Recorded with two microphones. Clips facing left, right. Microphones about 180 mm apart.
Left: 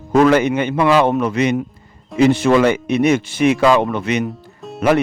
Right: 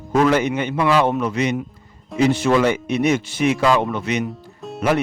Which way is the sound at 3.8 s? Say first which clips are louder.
Left 3 dB; 60° left (ahead or behind).